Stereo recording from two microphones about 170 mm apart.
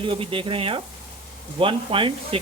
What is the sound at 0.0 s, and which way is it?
Speech, 30° right (ahead or behind).